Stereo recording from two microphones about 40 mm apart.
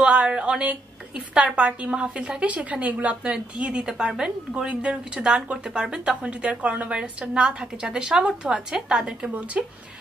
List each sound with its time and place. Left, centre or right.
0.0 s a sound: right
1.3 s a woman's voice: right
3.8 s a woman's voice: centre